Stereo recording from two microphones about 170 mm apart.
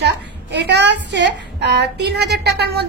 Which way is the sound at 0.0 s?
80° right.